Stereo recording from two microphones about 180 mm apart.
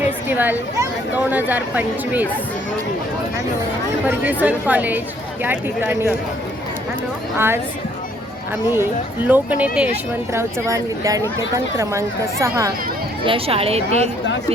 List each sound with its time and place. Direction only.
0.3 s speech: 10° right (ahead or behind)
4.1 s speech: 10° right (ahead or behind)
7.3 s speech: 15° right (ahead or behind)
8.7 s speech: 10° right (ahead or behind)
13.2 s a woman's voice: 30° right (ahead or behind)